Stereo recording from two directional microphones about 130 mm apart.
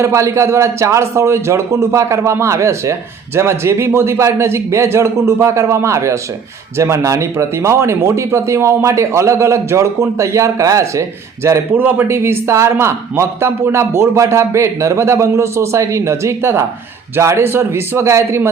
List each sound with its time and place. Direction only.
0.0 s a man's voice: 20° right (ahead or behind)